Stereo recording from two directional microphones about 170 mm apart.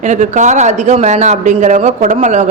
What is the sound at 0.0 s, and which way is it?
A man's voice, 45° right (ahead or behind).